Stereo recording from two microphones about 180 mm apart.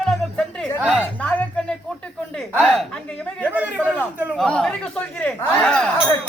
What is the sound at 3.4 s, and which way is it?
Chatter, 10° right (ahead or behind).